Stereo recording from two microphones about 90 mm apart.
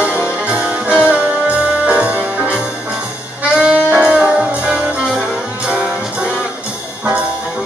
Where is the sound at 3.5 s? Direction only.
10° right (ahead or behind).